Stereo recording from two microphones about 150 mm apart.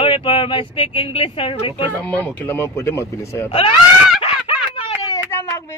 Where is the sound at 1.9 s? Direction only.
10° left (ahead or behind).